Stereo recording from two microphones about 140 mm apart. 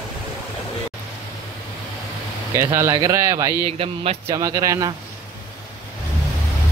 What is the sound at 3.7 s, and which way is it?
Speech, 45° right (ahead or behind).